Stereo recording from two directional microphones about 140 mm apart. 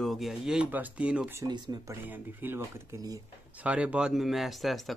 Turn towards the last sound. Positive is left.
turn(degrees=0)  # may be behind; listen again after turning